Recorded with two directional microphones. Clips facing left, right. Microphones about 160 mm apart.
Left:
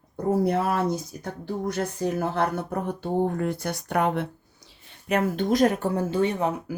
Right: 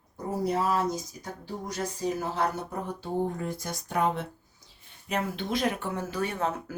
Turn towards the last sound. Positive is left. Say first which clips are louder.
# left 5 dB
turn(degrees=15)  # may be behind; listen again after turning